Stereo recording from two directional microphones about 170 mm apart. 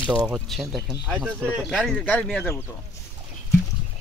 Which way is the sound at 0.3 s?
5° right (ahead or behind).